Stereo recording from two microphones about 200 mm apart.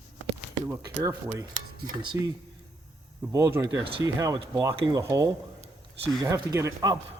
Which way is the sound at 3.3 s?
15° right (ahead or behind).